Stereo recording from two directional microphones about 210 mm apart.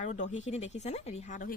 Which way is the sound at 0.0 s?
35° left (ahead or behind).